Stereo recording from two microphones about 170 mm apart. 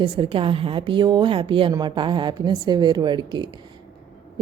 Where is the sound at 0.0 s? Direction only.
30° right (ahead or behind).